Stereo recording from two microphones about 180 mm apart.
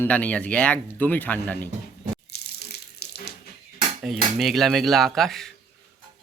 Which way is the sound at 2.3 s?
65° left (ahead or behind).